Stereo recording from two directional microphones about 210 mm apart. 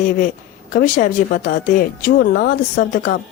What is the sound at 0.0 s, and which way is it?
Speech, 40° left (ahead or behind).